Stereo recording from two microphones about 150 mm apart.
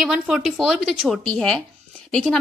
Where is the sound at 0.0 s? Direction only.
5° right (ahead or behind).